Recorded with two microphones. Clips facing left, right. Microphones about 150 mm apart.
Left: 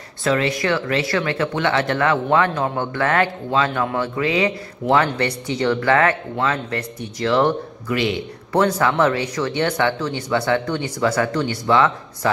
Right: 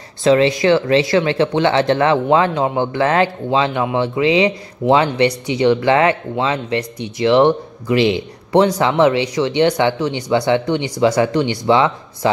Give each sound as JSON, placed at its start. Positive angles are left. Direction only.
{"t": 0.2, "sound": "speech", "side_deg": -20}